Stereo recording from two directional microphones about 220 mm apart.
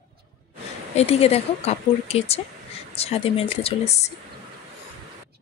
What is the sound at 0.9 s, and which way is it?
Speech, 25° left (ahead or behind).